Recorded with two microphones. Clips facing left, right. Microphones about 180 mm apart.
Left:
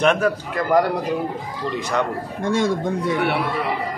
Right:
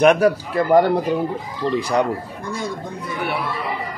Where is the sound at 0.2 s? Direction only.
30° right (ahead or behind).